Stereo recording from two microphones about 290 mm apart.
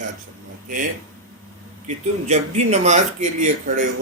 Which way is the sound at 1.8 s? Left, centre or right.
Right.